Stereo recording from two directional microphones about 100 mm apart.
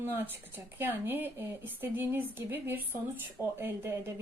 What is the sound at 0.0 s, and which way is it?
Speech, 20° right (ahead or behind).